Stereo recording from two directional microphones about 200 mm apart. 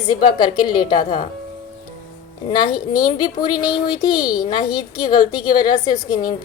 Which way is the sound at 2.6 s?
20° left (ahead or behind).